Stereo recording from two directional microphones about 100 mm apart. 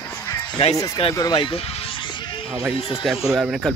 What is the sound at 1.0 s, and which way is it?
Speech, 70° left (ahead or behind).